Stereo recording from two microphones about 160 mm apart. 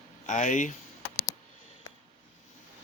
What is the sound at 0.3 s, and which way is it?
Speech, 50° left (ahead or behind).